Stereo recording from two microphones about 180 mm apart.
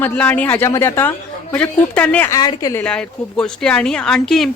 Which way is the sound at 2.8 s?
5° left (ahead or behind).